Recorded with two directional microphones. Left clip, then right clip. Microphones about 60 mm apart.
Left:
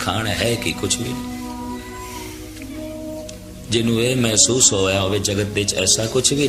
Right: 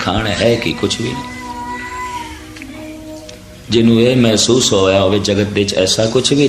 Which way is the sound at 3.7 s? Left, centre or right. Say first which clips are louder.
Right 7 dB; left.